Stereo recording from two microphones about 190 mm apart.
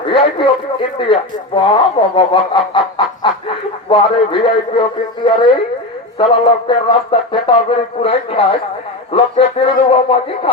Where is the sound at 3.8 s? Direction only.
25° left (ahead or behind).